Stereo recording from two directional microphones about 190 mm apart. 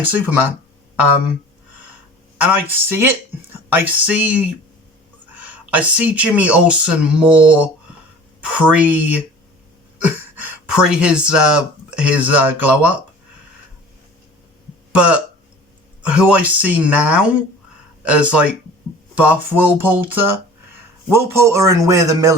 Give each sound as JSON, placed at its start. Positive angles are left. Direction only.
{"t": 0.0, "sound": "speech", "side_deg": -10}
{"t": 2.4, "sound": "speech", "side_deg": -10}
{"t": 14.9, "sound": "speech", "side_deg": -5}